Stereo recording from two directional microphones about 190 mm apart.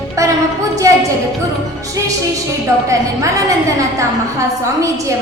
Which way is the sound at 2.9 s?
15° right (ahead or behind).